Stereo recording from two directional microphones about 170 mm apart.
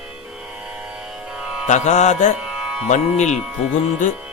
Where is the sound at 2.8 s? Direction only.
45° left (ahead or behind).